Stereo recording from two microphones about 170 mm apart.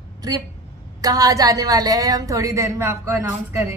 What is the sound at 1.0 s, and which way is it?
A woman's voice, 20° right (ahead or behind).